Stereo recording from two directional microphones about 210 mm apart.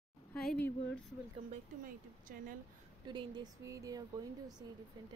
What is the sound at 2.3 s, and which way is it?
Speech, 40° right (ahead or behind).